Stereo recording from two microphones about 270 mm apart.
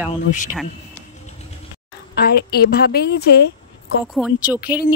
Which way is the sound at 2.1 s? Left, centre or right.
Left.